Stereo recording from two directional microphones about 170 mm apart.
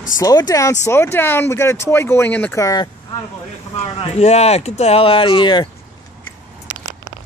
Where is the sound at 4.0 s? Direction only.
40° left (ahead or behind).